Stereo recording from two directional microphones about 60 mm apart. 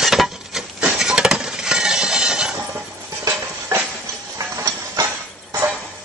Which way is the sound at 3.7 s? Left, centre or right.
Right.